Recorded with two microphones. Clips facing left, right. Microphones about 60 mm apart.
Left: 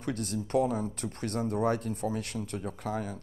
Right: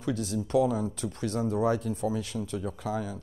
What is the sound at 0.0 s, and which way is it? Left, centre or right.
Speech, left.